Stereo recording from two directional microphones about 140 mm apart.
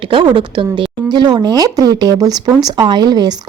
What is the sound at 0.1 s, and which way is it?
Speech, 35° right (ahead or behind).